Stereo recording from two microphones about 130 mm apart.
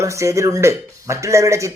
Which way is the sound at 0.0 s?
25° right (ahead or behind).